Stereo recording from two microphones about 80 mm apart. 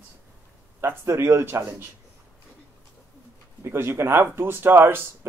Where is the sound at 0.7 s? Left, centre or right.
Right.